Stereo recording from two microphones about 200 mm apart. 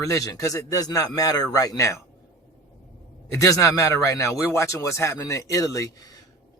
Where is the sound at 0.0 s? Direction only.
15° left (ahead or behind).